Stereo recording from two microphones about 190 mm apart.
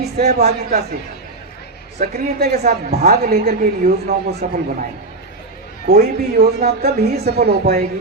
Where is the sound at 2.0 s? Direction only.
55° right (ahead or behind).